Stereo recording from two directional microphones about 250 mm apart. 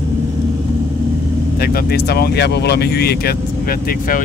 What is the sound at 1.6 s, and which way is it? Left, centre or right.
Speech, left.